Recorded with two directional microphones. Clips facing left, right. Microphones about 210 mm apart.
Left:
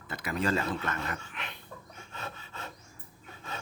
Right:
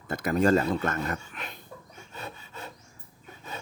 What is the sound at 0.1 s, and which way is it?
Speech, 45° right (ahead or behind).